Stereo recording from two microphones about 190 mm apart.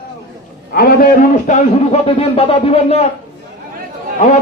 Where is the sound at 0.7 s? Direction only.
50° left (ahead or behind); by 3.0 s 30° left (ahead or behind).